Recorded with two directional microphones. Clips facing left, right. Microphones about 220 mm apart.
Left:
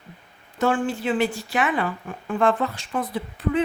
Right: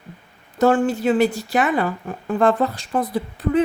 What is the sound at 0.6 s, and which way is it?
A woman's voice, 40° right (ahead or behind).